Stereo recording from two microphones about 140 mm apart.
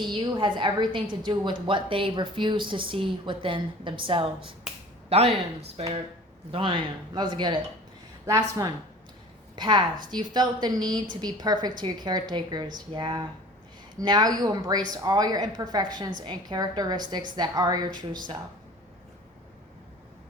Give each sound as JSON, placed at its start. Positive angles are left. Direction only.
{"t": 0.0, "sound": "speech", "side_deg": -35}
{"t": 6.5, "sound": "speech", "side_deg": -40}